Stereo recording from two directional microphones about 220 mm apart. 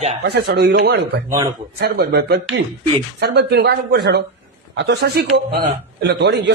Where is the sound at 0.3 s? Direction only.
50° right (ahead or behind).